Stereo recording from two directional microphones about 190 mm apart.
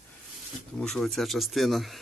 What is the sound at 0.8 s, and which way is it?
Speech, centre (ahead or behind).